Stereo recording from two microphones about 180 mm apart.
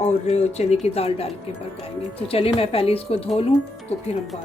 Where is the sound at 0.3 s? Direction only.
35° left (ahead or behind).